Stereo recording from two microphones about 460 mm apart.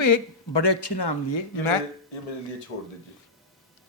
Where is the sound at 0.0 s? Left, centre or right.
Left.